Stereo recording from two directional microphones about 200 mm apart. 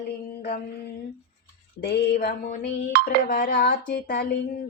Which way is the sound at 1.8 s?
55° left (ahead or behind).